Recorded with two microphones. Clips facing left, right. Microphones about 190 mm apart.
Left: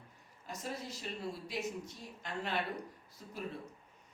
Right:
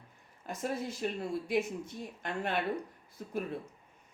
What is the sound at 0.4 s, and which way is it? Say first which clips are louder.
Speech: right 7 dB; 55° right (ahead or behind).